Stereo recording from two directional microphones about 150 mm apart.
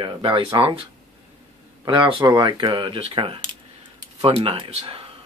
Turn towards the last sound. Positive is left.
turn(degrees=-40)  # may be behind; listen again after turning